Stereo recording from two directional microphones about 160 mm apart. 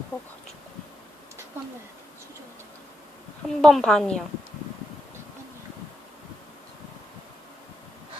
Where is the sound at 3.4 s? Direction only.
5° left (ahead or behind).